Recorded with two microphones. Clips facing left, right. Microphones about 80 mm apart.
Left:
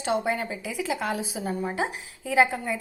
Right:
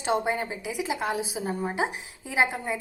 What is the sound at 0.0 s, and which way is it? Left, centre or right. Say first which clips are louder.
A woman's voice: even; right.